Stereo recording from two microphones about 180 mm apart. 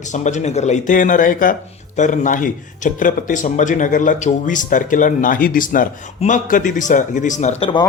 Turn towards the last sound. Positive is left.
turn(degrees=30)  # may be behind; listen again after turning